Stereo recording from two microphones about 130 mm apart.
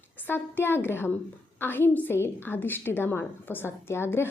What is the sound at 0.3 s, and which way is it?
A woman's voice, 15° left (ahead or behind).